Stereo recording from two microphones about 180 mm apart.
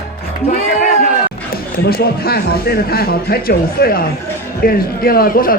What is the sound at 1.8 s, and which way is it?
Speech, 60° left (ahead or behind).